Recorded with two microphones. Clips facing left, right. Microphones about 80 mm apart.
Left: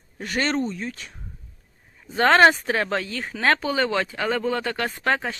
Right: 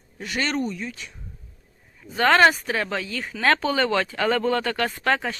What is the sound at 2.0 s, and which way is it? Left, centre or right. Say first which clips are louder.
Speech: left 1 dB; left.